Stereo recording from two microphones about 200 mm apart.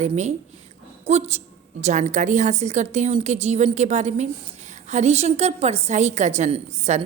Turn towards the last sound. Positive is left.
turn(degrees=-35)  # may be behind; listen again after turning